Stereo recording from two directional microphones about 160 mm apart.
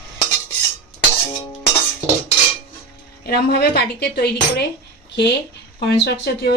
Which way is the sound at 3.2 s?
85° left.